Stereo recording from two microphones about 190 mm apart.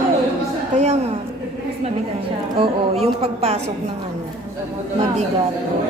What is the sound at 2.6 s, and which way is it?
A woman's voice, 30° right (ahead or behind).